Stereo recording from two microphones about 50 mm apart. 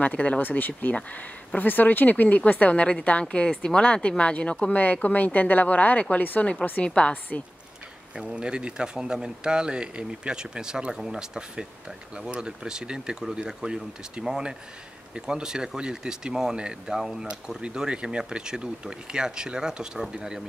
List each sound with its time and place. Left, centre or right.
0.0 s a woman's voice: left
0.4 s a woman's voice: left
8.2 s speech: centre